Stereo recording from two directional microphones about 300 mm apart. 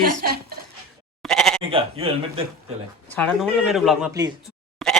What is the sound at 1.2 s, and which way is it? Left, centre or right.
Bleat, centre.